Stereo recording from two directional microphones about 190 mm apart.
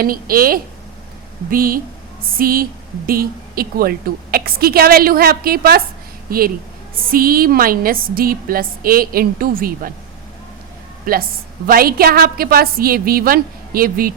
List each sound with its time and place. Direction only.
0.0 s a woman's voice: 50° right (ahead or behind)
11.0 s a woman's voice: 50° right (ahead or behind)